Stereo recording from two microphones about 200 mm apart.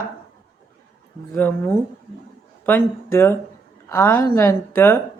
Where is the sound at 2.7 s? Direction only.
10° left (ahead or behind).